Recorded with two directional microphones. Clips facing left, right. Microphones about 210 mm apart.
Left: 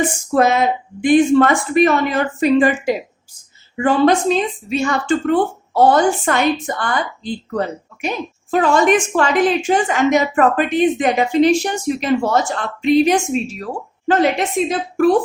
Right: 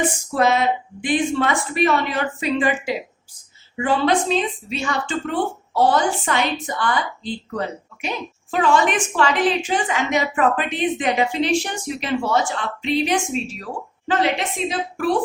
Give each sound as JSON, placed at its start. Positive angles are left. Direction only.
{"t": 0.3, "sound": "a woman's voice", "side_deg": 50}
{"t": 8.0, "sound": "a woman's voice", "side_deg": 45}
{"t": 14.7, "sound": "a woman's voice", "side_deg": 45}